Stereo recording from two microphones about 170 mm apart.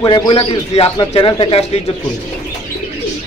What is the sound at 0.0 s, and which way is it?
A man's voice, 25° left (ahead or behind).